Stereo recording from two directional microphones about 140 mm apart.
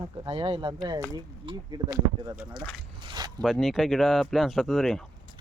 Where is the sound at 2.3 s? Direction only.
15° right (ahead or behind).